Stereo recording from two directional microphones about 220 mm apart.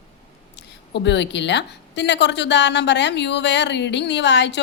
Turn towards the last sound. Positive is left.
turn(degrees=50)  # may be behind; listen again after turning